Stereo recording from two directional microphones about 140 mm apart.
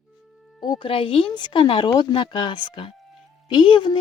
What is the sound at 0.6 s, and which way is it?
Speech, 30° left (ahead or behind).